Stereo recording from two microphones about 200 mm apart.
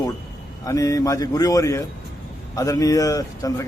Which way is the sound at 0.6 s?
15° left (ahead or behind).